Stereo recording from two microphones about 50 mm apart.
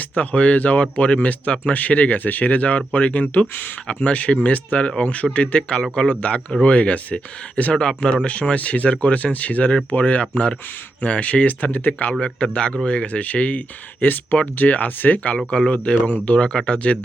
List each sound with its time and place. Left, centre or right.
0.2 s speech: left
7.7 s speech: centre
15.4 s speech: centre
15.7 s speech: left